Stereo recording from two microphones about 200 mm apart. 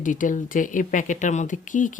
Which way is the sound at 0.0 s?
40° left (ahead or behind).